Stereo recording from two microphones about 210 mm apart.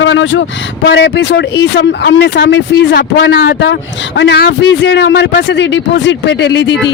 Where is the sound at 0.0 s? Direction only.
65° left (ahead or behind).